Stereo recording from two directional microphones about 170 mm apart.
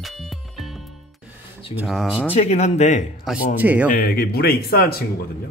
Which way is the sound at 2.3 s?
35° left (ahead or behind).